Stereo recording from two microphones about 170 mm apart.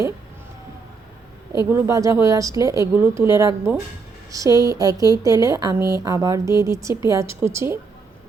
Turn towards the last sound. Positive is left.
turn(degrees=-15)  # may be behind; listen again after turning